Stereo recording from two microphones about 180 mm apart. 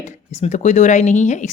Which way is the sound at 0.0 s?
40° left (ahead or behind).